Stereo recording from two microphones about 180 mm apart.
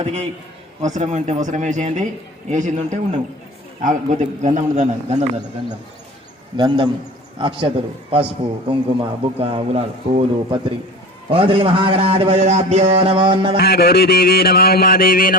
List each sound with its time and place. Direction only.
0.0 s a man's voice: 35° right (ahead or behind)
6.6 s a man's voice: 25° right (ahead or behind)
8.7 s a man's voice: 30° right (ahead or behind)
13.6 s a sound: 60° left (ahead or behind)